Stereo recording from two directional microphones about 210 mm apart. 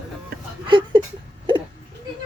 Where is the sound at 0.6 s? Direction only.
25° right (ahead or behind).